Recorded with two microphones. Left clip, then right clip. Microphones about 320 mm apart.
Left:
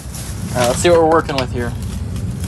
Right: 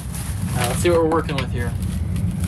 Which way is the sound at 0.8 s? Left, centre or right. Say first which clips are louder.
Left 5 dB; left.